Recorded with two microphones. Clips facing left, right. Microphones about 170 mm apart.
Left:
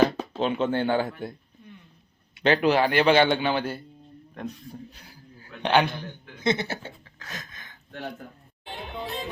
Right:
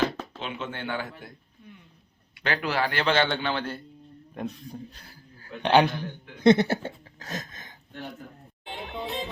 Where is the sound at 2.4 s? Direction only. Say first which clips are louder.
Left 7 dB; 20° left (ahead or behind).